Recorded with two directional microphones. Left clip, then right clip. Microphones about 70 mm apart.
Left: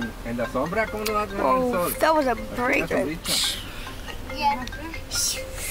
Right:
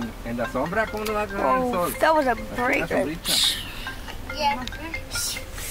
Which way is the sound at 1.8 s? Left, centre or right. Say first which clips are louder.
Right 1 dB; centre.